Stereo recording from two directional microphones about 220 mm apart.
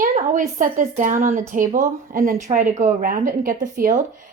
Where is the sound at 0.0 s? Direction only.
35° right (ahead or behind).